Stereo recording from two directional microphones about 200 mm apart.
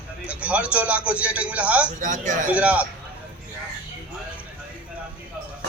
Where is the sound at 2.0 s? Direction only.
40° right (ahead or behind).